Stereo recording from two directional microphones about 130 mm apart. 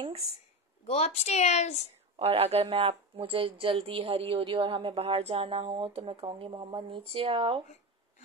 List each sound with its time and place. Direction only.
0.8 s a woman's voice: 55° left (ahead or behind)
2.1 s a woman's voice: 50° right (ahead or behind)